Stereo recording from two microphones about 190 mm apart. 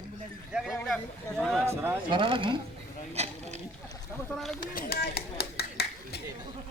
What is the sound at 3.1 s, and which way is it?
Mechanisms, 35° right (ahead or behind).